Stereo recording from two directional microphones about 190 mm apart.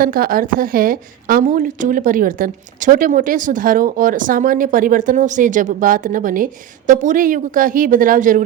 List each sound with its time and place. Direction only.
0.0 s a woman's voice: 50° right (ahead or behind)